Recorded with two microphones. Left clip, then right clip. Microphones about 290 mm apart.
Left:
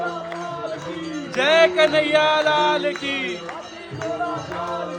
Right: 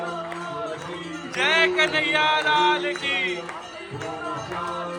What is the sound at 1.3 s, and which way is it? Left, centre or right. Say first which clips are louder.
Music: left 4 dB; centre.